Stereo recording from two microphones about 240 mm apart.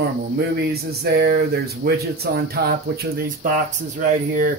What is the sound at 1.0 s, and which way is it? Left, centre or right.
Speech, right.